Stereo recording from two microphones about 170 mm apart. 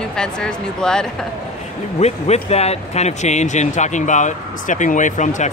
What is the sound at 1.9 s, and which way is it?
Speech, 40° left (ahead or behind).